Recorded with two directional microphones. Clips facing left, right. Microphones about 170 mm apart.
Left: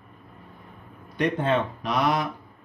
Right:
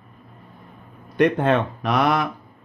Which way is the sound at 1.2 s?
60° right (ahead or behind).